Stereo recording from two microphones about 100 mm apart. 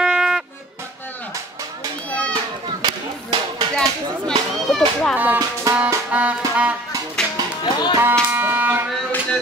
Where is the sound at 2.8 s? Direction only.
50° right (ahead or behind).